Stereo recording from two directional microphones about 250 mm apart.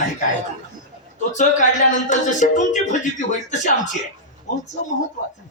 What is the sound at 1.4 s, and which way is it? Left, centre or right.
Speech, left.